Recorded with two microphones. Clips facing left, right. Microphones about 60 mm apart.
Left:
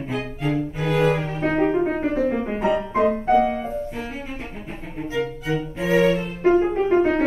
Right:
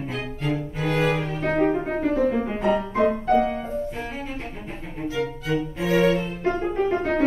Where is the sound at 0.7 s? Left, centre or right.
Centre.